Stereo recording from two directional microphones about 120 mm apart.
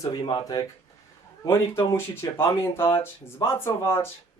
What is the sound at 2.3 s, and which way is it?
Speech, 20° left (ahead or behind).